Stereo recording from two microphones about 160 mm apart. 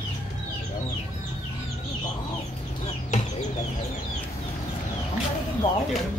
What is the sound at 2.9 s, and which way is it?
Chicken, 45° left (ahead or behind).